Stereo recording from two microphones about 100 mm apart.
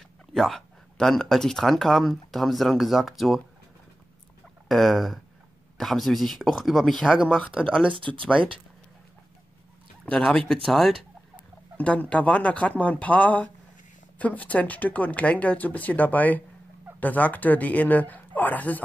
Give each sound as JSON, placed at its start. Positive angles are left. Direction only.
{"t": 0.3, "sound": "speech", "side_deg": 0}
{"t": 4.6, "sound": "speech", "side_deg": 0}
{"t": 7.2, "sound": "speech", "side_deg": 15}
{"t": 10.0, "sound": "speech", "side_deg": 10}
{"t": 11.8, "sound": "speech", "side_deg": 15}